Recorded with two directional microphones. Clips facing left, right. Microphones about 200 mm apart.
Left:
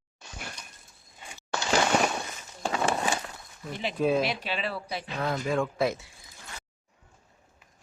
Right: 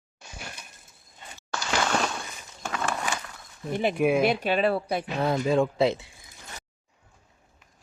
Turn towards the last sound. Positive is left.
turn(degrees=-25)  # may be behind; listen again after turning